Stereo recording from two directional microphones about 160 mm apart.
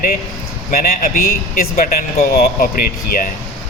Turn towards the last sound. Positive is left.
turn(degrees=60)  # may be behind; listen again after turning